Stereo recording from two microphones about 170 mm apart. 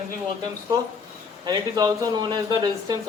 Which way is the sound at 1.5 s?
25° right (ahead or behind).